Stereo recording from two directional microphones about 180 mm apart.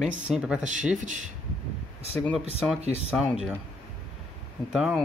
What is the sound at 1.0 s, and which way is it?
Speech, 45° right (ahead or behind).